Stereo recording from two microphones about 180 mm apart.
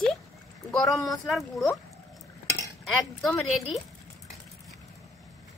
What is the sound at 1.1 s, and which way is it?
Speech, centre (ahead or behind).